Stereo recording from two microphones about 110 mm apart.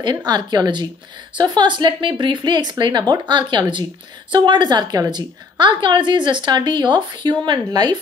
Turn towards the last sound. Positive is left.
turn(degrees=-40)  # may be behind; listen again after turning